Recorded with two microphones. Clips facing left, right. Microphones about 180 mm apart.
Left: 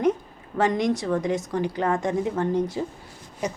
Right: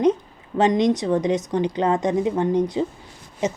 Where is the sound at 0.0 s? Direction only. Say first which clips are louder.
Right 4 dB; 20° right (ahead or behind).